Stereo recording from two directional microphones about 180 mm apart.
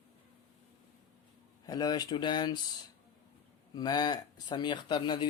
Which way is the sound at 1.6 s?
20° left (ahead or behind).